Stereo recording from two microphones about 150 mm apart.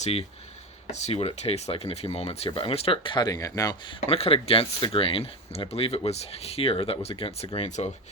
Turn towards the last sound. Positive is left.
turn(degrees=50)  # may be behind; listen again after turning